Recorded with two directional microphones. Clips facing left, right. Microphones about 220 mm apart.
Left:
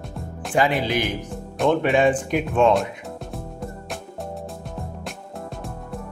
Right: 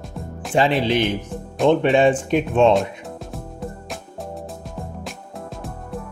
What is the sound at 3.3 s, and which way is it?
Music, centre (ahead or behind).